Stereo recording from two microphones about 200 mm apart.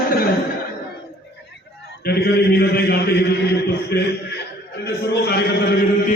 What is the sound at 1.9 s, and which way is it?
A man's voice, 55° left (ahead or behind).